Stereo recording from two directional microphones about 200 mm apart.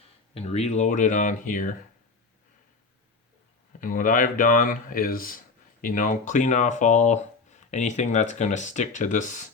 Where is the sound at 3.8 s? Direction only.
40° left (ahead or behind).